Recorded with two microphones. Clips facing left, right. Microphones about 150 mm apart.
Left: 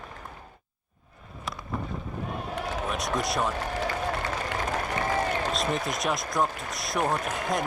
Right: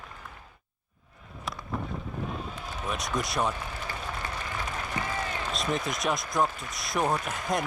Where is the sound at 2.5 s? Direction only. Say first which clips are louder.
Left 7 dB; 70° left (ahead or behind).